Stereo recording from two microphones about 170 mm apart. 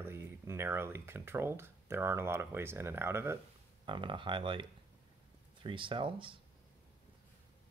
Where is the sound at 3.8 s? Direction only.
30° right (ahead or behind).